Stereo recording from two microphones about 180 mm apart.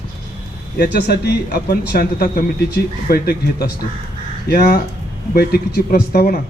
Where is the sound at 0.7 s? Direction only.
60° left (ahead or behind).